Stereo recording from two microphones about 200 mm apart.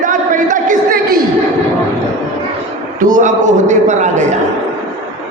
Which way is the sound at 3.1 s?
40° right (ahead or behind).